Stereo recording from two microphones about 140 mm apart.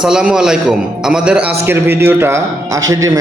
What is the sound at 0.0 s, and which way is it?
A man's voice, 5° right (ahead or behind).